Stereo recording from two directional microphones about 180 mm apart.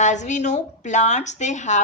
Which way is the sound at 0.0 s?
40° left (ahead or behind).